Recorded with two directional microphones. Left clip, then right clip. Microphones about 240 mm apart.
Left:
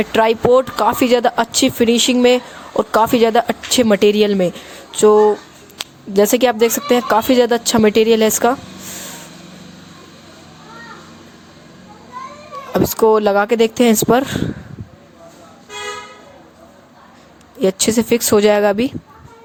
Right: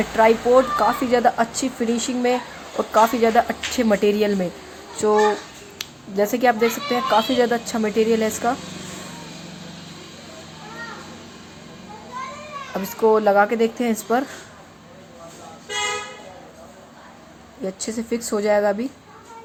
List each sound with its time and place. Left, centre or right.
0.0 s speech: left
12.7 s speech: left
17.6 s speech: left